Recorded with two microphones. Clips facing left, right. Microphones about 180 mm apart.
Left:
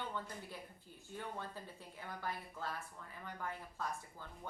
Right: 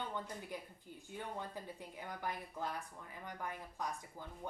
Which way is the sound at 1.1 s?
15° right (ahead or behind).